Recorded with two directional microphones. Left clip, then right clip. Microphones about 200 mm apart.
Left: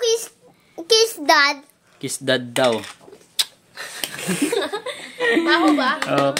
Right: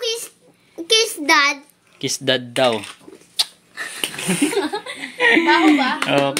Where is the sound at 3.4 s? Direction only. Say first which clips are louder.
Right 2 dB; 15° left (ahead or behind).